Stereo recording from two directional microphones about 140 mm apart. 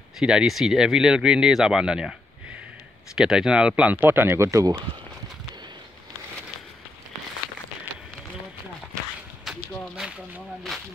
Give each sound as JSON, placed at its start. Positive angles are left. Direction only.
{"t": 0.2, "sound": "speech", "side_deg": -5}
{"t": 3.2, "sound": "speech", "side_deg": -5}
{"t": 9.4, "sound": "a sound", "side_deg": -5}